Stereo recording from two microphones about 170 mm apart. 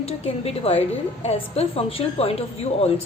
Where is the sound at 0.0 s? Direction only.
35° left (ahead or behind).